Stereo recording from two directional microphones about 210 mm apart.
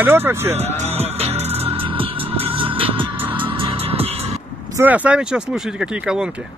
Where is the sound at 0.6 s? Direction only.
30° right (ahead or behind).